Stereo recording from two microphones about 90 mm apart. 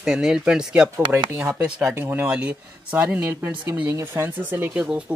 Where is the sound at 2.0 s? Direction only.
25° right (ahead or behind).